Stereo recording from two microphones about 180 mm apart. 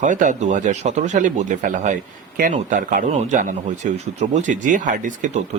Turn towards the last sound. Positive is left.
turn(degrees=-45)  # may be behind; listen again after turning